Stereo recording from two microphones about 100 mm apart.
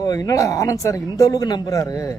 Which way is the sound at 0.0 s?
40° left (ahead or behind).